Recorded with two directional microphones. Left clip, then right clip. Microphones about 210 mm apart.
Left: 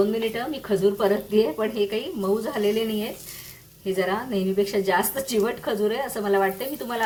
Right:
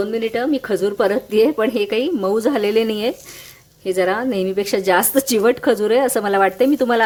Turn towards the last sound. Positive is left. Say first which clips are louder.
# right 14 dB
turn(degrees=-55)  # may be behind; listen again after turning